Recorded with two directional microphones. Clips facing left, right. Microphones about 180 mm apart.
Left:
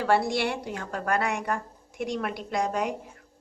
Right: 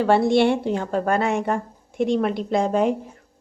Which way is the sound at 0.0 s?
25° right (ahead or behind).